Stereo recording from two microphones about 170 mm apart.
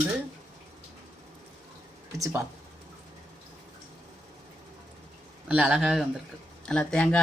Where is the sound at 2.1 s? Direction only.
20° right (ahead or behind).